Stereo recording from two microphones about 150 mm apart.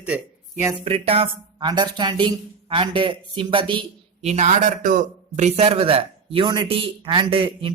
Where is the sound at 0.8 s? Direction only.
40° right (ahead or behind).